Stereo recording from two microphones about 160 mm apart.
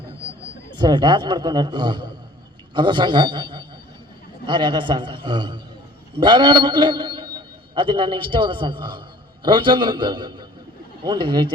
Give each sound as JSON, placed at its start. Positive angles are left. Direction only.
{"t": 0.8, "sound": "a man's voice", "side_deg": -30}